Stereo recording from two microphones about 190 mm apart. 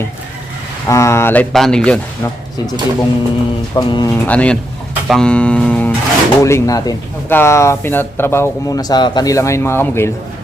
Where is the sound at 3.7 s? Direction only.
20° left (ahead or behind).